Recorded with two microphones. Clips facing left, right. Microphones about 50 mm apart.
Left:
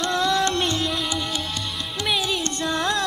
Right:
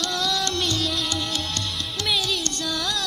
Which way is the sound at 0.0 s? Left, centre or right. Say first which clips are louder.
Left 4 dB; left.